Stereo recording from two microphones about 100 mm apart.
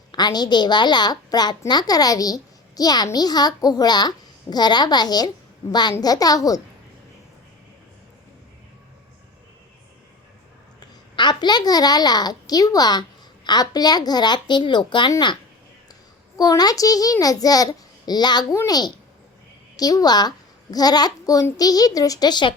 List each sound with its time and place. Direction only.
0.1 s a child's voice: 45° left (ahead or behind)
10.8 s a child's voice: 45° left (ahead or behind)
16.4 s a child's voice: 40° left (ahead or behind)